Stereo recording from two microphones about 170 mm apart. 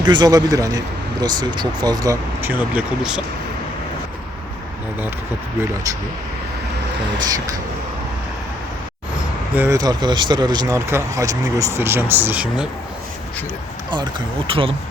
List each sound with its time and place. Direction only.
0.0 s speech: 25° right (ahead or behind); by 3.2 s 5° right (ahead or behind)
9.6 s speech: 20° right (ahead or behind)
13.9 s speech: 30° right (ahead or behind)